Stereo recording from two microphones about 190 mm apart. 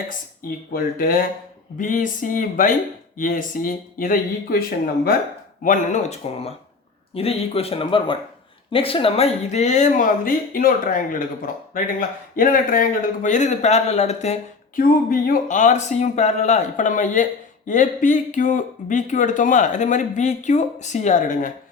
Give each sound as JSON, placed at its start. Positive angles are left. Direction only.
{"t": 0.7, "sound": "speech", "side_deg": 50}
{"t": 5.6, "sound": "speech", "side_deg": 40}
{"t": 14.8, "sound": "speech", "side_deg": 45}